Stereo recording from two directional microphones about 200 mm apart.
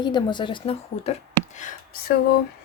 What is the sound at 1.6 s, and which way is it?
Speech, 40° left (ahead or behind).